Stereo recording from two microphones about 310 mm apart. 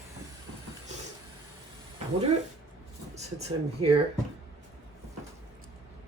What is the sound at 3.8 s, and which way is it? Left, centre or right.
Speech, centre.